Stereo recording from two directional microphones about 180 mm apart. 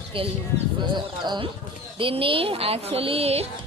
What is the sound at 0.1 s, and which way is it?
Speech, 30° right (ahead or behind).